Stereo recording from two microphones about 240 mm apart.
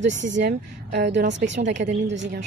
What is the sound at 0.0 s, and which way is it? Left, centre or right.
A woman's voice, right.